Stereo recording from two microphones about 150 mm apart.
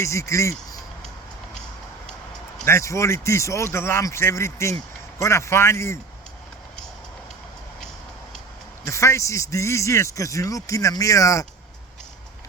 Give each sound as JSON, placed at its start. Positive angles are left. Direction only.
{"t": 0.0, "sound": "speech", "side_deg": 20}
{"t": 2.6, "sound": "speech", "side_deg": 20}
{"t": 8.9, "sound": "speech", "side_deg": 20}